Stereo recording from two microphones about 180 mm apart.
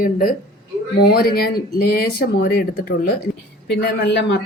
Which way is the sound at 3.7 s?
75° left (ahead or behind).